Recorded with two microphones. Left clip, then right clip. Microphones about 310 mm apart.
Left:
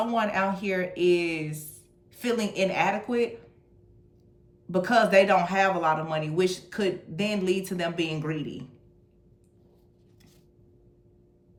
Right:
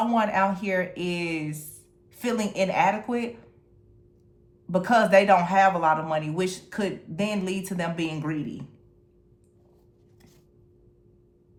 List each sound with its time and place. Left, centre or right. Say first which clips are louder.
0.0 s speech: right 3 dB; centre
4.7 s speech: right 2 dB; centre